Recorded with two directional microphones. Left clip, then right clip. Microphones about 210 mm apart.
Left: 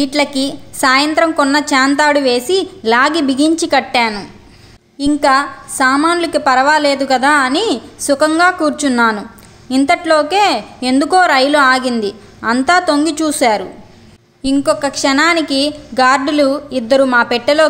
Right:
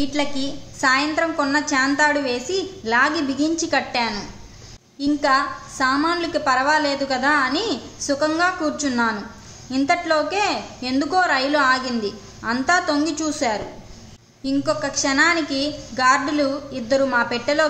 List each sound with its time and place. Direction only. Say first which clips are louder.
0.0 s a woman's voice: left 9 dB; 45° left (ahead or behind)